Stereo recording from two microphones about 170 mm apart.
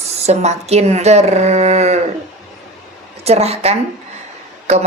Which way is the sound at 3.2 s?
40° right (ahead or behind).